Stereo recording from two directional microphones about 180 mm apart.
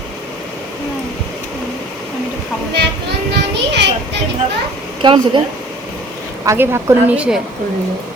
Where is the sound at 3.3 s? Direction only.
70° right (ahead or behind).